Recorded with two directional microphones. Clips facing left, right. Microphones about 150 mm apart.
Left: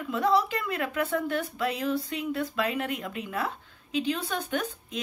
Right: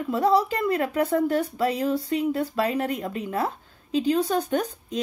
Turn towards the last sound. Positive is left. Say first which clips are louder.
# right 5 dB
turn(degrees=-35)  # may be behind; listen again after turning